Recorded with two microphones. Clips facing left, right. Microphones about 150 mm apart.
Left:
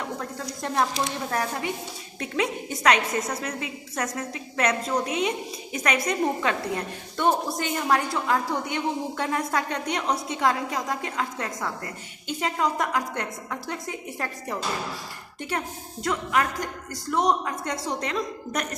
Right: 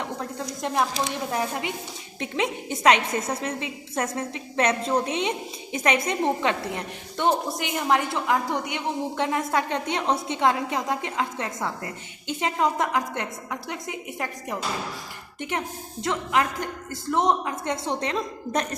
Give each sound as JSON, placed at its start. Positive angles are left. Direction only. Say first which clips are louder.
{"t": 0.6, "sound": "a woman's voice", "louder": "even", "side_deg": -15}